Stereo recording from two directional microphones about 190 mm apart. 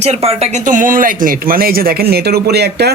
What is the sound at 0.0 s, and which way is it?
A man's voice, 35° right (ahead or behind).